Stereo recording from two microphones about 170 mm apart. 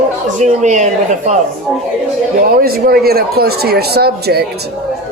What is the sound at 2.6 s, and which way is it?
Speech, 60° right (ahead or behind).